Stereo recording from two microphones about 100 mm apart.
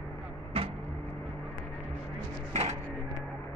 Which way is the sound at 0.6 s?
65° right (ahead or behind).